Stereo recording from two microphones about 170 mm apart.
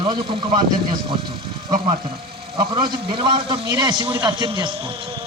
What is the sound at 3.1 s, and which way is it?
A man's voice, 30° right (ahead or behind).